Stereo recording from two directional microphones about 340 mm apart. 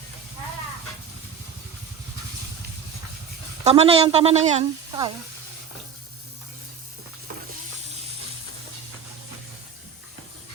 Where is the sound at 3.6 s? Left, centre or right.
Centre.